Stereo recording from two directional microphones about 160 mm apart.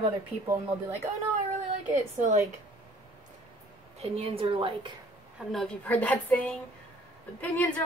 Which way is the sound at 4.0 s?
40° right (ahead or behind).